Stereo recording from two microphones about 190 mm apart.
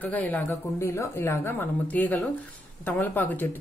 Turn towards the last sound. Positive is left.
turn(degrees=10)  # may be behind; listen again after turning